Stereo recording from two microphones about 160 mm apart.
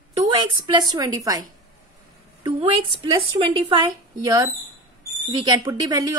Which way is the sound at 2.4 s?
35° right (ahead or behind).